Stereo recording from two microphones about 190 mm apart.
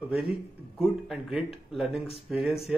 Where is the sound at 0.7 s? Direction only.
5° right (ahead or behind).